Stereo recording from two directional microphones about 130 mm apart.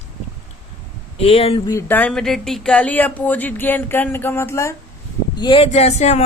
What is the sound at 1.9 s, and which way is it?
Speech, 10° left (ahead or behind).